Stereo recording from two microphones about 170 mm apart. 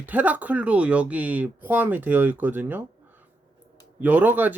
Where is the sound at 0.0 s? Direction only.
10° right (ahead or behind).